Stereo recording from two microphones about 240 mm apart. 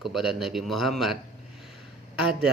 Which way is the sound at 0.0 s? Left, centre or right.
Centre.